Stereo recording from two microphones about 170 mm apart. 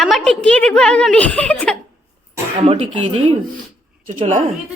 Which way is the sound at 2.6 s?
35° right (ahead or behind).